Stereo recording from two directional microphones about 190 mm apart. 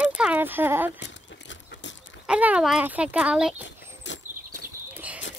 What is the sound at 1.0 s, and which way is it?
Horse, 70° left (ahead or behind).